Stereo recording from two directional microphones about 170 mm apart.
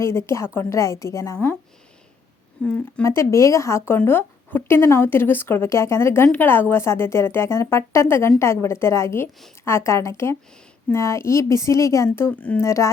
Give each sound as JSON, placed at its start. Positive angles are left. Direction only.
{"t": 0.0, "sound": "speech", "side_deg": 15}
{"t": 2.6, "sound": "speech", "side_deg": 10}